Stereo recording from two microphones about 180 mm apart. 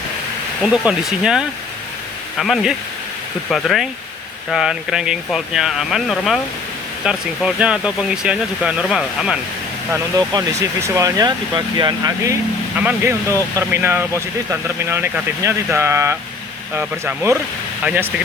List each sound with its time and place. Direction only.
0.6 s speech: 5° right (ahead or behind)
9.9 s speech: 15° right (ahead or behind)